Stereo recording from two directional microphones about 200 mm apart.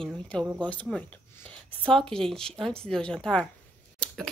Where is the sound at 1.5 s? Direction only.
5° left (ahead or behind).